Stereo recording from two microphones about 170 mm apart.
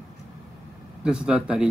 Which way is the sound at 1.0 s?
5° right (ahead or behind).